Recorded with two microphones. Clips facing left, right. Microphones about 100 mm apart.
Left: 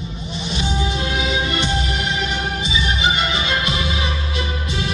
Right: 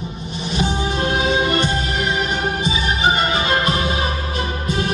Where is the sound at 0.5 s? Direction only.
45° right (ahead or behind).